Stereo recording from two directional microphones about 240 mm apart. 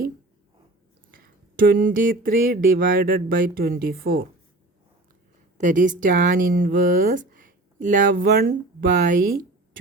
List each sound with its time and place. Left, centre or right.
1.1 s speech: right
5.5 s speech: right